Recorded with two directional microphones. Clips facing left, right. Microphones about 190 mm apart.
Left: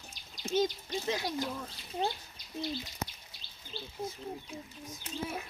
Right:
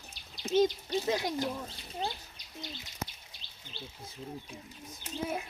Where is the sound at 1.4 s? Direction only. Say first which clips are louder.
Right 2 dB; 20° right (ahead or behind).